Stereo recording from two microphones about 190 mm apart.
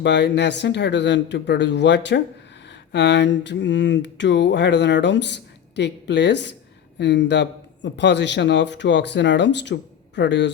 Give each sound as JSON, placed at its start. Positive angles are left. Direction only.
{"t": 0.0, "sound": "speech", "side_deg": 65}